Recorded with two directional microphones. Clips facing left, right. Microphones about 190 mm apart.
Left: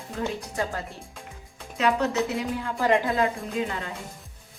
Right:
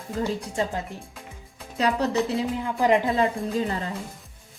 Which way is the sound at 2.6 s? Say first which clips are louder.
Right 2 dB; 15° right (ahead or behind).